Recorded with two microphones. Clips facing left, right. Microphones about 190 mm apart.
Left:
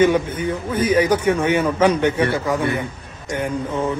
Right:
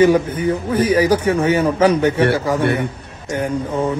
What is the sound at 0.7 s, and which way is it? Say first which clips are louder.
A man's voice: right 1 dB; 30° right (ahead or behind).